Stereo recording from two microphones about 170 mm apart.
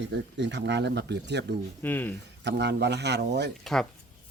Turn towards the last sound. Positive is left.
turn(degrees=5)  # may be behind; listen again after turning